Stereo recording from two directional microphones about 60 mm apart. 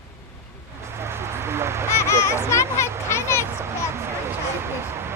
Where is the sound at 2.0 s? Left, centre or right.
Left.